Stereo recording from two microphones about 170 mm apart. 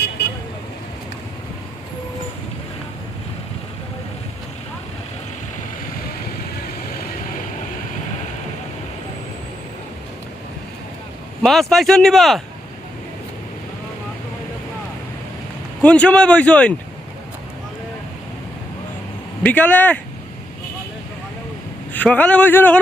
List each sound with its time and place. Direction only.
11.4 s speech: centre (ahead or behind)
15.8 s speech: 5° left (ahead or behind)
19.4 s speech: 10° left (ahead or behind)
21.9 s speech: 10° left (ahead or behind)